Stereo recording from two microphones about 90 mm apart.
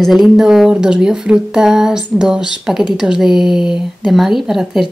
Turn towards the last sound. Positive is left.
turn(degrees=-5)  # may be behind; listen again after turning